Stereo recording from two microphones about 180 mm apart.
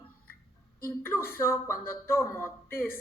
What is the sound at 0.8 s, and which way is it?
Speech, 15° left (ahead or behind).